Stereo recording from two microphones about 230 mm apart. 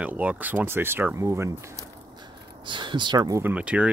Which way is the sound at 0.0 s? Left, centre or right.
Centre.